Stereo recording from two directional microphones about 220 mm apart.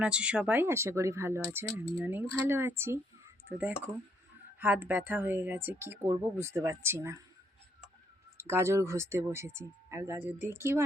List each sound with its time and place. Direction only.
0.0 s speech: 5° right (ahead or behind)
8.4 s speech: 10° right (ahead or behind)